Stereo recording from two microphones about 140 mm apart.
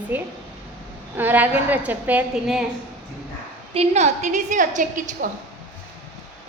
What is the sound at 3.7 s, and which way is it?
A woman's voice, 50° right (ahead or behind).